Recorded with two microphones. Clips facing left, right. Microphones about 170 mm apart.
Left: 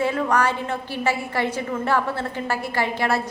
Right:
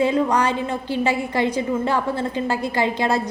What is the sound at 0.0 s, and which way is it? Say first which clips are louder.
A woman's voice: right 3 dB; 20° right (ahead or behind).